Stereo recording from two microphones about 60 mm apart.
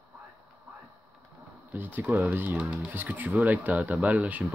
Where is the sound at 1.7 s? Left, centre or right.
Right.